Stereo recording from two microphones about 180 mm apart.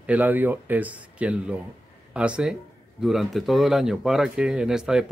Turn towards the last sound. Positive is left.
turn(degrees=-5)  # may be behind; listen again after turning